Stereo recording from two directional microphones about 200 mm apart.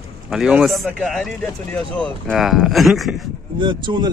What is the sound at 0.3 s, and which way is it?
Speech, centre (ahead or behind).